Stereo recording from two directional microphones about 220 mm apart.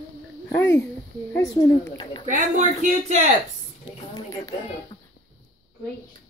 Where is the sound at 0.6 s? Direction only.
10° left (ahead or behind).